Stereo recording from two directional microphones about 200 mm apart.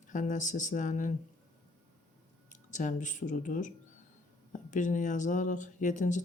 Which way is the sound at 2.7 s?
40° left (ahead or behind).